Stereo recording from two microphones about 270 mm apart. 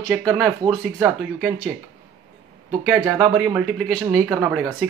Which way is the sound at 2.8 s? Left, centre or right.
Centre.